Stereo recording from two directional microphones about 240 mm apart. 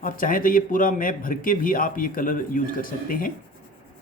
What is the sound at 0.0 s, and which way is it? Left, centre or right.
A man's voice, left.